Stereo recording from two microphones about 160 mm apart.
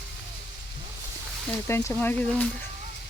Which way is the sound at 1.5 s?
15° left (ahead or behind).